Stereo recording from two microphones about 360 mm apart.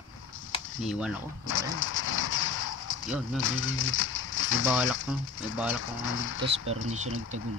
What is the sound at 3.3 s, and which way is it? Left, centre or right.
Speech, left.